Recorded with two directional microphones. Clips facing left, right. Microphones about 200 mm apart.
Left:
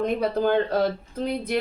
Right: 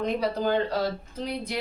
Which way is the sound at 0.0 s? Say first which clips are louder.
Left 3 dB; 55° left (ahead or behind).